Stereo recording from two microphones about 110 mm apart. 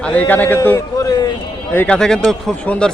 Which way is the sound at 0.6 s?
25° left (ahead or behind).